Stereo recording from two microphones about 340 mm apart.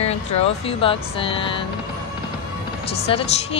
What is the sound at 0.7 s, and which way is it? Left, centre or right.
Speech, centre.